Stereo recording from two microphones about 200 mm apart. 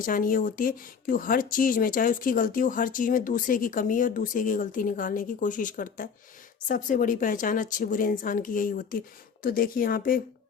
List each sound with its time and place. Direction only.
0.0 s speech: 45° left (ahead or behind)